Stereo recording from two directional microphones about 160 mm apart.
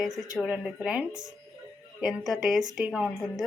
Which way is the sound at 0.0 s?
Centre (ahead or behind).